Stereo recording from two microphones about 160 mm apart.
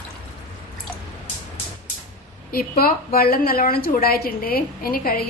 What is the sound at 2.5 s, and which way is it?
A woman's voice, 65° left (ahead or behind).